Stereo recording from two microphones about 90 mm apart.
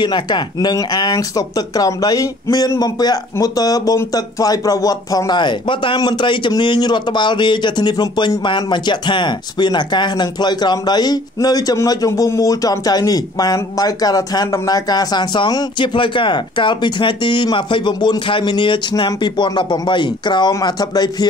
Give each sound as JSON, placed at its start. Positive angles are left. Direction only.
{"t": 0.0, "sound": "a man's voice", "side_deg": 55}
{"t": 5.4, "sound": "a man's voice", "side_deg": 65}